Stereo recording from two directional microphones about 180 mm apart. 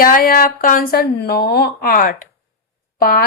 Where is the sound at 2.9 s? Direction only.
55° left (ahead or behind).